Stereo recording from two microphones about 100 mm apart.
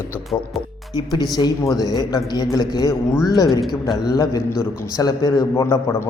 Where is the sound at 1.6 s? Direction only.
35° left (ahead or behind).